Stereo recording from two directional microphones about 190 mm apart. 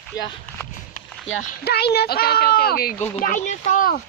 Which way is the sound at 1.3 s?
60° left (ahead or behind).